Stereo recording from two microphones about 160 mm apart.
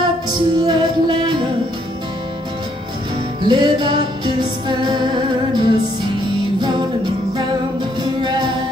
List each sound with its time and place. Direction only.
0.3 s music: 25° right (ahead or behind)
3.4 s music: 30° right (ahead or behind)
8.0 s music: 25° right (ahead or behind)